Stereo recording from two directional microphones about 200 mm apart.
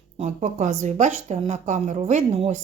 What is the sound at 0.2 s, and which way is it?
A woman's voice, 35° right (ahead or behind).